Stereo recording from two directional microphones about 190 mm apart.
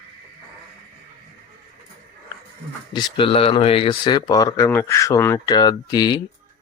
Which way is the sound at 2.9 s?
25° left (ahead or behind).